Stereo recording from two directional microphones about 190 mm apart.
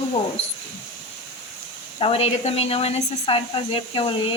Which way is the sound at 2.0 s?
30° left (ahead or behind).